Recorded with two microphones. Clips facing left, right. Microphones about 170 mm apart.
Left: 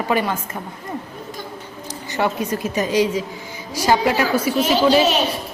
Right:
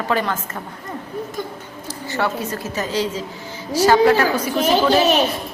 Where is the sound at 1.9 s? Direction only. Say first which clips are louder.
Left 1 dB; 15° left (ahead or behind).